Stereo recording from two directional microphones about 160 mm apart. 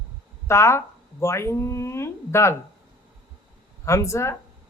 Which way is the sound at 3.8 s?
20° left (ahead or behind).